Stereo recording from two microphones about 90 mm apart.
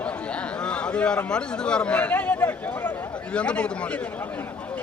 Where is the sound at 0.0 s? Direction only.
15° left (ahead or behind).